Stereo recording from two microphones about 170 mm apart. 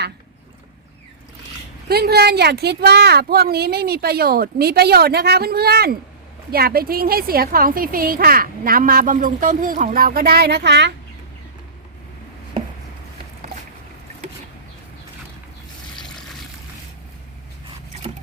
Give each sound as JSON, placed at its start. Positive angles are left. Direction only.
{"t": 1.9, "sound": "a woman's voice", "side_deg": -70}